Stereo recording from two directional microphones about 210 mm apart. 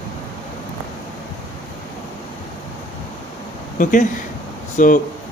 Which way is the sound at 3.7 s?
40° left (ahead or behind).